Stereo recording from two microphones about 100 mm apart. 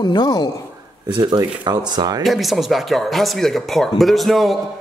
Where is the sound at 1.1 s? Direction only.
50° right (ahead or behind).